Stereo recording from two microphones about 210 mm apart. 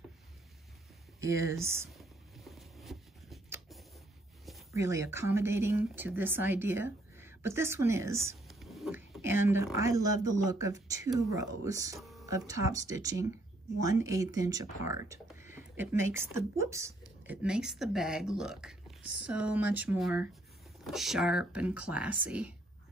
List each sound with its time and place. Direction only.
1.2 s speech: 15° right (ahead or behind)
2.0 s a sound: centre (ahead or behind)
4.7 s speech: 15° right (ahead or behind)
8.5 s whispering: centre (ahead or behind)
9.2 s speech: 10° right (ahead or behind)
12.0 s a sound: centre (ahead or behind)
12.3 s speech: 15° right (ahead or behind)
15.5 s speech: 10° right (ahead or behind)